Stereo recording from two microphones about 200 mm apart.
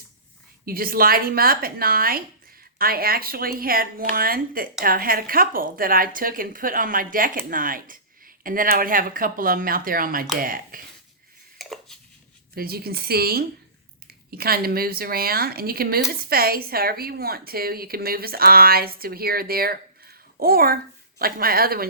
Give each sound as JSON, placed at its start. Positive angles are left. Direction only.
{"t": 0.6, "sound": "speech", "side_deg": -45}
{"t": 11.5, "sound": "dishes", "side_deg": 0}
{"t": 12.5, "sound": "speech", "side_deg": -50}